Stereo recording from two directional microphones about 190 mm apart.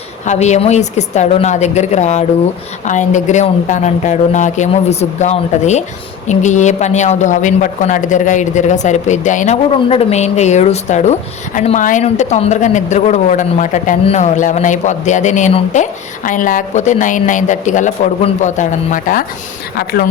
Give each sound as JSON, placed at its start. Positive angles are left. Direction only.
{"t": 0.3, "sound": "speech", "side_deg": 35}
{"t": 19.7, "sound": "speech", "side_deg": 55}